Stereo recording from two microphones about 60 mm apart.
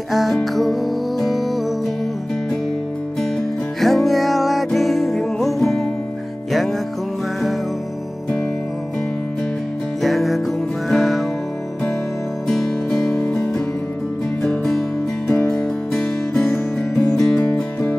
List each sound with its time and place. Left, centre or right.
0.1 s music: centre
3.8 s music: centre
10.0 s music: centre
12.4 s music: centre